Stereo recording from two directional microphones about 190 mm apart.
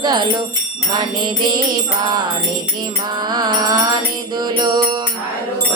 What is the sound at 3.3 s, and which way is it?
Music, 20° right (ahead or behind).